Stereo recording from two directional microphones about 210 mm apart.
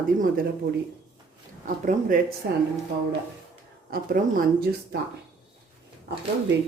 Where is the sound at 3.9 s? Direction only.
45° right (ahead or behind).